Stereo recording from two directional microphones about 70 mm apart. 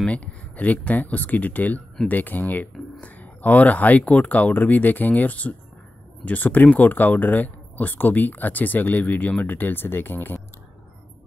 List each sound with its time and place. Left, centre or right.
0.0 s speech: centre